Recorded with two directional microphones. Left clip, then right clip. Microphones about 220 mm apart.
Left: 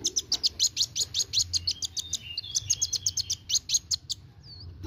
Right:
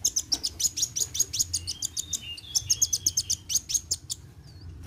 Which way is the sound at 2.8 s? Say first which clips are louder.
Right 2 dB; 15° left (ahead or behind).